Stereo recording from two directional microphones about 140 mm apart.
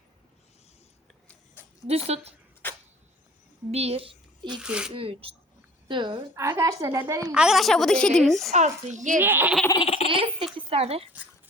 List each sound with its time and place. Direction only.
1.9 s speech: 45° right (ahead or behind)
2.6 s a sound: 15° left (ahead or behind)
3.7 s a woman's voice: 45° right (ahead or behind)
4.6 s a woman's voice: 5° right (ahead or behind)
4.9 s speech: 40° right (ahead or behind)
6.3 s a woman's voice: 20° right (ahead or behind)
7.3 s a woman's voice: 5° right (ahead or behind)
8.5 s speech: 55° right (ahead or behind)
9.2 s speech: 15° right (ahead or behind)
9.7 s baby laughter: 45° left (ahead or behind)
10.1 s speech: 40° right (ahead or behind)